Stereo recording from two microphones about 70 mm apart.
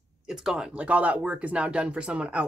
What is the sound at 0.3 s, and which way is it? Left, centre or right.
Speech, centre.